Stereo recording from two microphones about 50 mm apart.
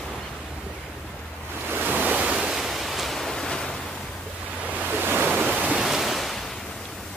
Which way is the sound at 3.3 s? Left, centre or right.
Centre.